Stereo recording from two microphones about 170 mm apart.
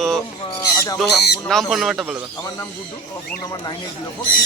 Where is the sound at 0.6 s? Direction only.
20° left (ahead or behind).